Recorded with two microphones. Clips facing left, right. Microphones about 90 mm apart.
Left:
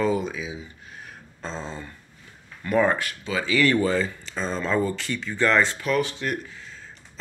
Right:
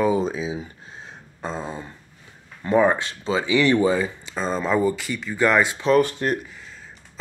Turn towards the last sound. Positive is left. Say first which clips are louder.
# right 6 dB
turn(degrees=-40)  # may be behind; listen again after turning